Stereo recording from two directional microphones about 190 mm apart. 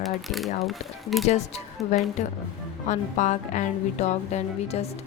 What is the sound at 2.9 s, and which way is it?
A woman's voice, 40° left (ahead or behind).